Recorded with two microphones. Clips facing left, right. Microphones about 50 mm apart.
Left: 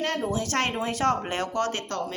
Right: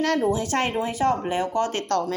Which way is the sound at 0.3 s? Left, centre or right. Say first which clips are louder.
Right 4 dB; right.